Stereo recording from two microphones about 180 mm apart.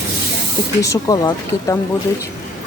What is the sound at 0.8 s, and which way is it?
Speech, 20° left (ahead or behind).